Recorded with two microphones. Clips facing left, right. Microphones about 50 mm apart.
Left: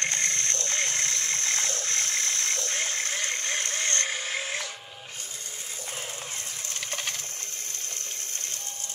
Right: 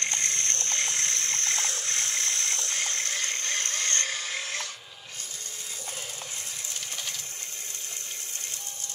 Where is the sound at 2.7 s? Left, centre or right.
Centre; by 4.1 s left.